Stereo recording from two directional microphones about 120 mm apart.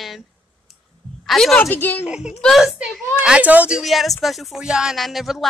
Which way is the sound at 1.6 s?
15° left (ahead or behind).